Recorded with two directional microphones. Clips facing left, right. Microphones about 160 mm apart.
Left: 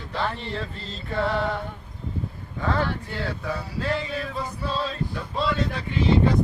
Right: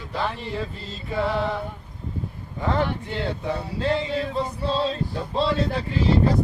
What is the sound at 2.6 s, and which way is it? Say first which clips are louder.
Speech: right 2 dB; 20° right (ahead or behind).